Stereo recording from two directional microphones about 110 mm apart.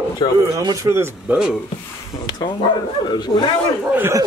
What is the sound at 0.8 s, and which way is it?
Speech, 30° right (ahead or behind).